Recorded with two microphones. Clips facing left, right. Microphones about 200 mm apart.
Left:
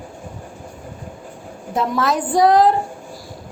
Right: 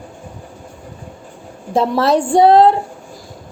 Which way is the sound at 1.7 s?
30° right (ahead or behind).